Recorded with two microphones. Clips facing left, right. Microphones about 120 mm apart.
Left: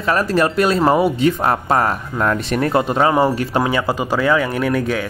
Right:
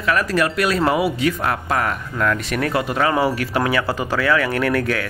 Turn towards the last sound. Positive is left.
turn(degrees=20)  # may be behind; listen again after turning